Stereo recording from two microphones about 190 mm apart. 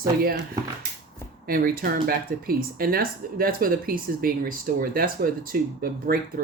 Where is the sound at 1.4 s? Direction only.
55° right (ahead or behind).